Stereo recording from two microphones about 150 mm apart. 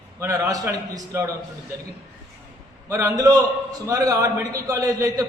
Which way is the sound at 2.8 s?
20° right (ahead or behind).